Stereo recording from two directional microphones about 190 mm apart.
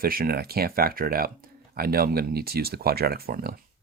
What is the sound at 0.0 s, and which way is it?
Speech, 50° right (ahead or behind).